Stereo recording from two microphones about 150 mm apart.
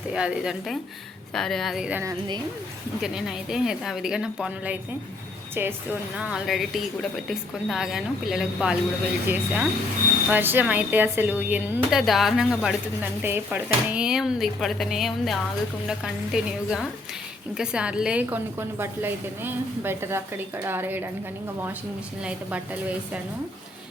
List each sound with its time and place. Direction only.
0.1 s a woman's voice: 5° right (ahead or behind)
2.0 s speech: 30° right (ahead or behind)
3.0 s a woman's voice: 5° right (ahead or behind)
13.0 s a woman's voice: 15° right (ahead or behind)
22.2 s speech: 10° right (ahead or behind)